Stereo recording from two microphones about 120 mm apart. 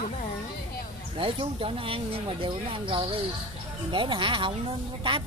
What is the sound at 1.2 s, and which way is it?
Speech, 50° right (ahead or behind).